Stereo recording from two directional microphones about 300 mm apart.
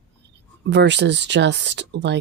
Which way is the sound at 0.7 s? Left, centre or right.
Right.